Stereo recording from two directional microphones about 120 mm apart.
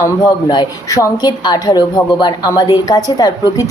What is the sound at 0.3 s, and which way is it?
A woman's voice, 35° left (ahead or behind).